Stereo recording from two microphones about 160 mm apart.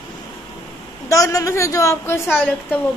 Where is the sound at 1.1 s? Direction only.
20° left (ahead or behind).